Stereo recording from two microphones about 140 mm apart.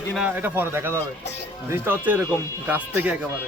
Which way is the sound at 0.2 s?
10° right (ahead or behind).